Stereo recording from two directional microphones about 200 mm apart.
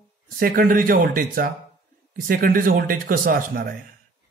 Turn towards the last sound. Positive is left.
turn(degrees=-45)  # may be behind; listen again after turning